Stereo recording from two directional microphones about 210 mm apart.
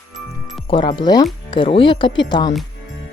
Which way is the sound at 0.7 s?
25° left (ahead or behind).